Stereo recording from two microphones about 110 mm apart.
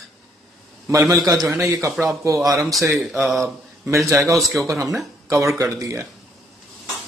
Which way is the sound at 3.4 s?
25° right (ahead or behind).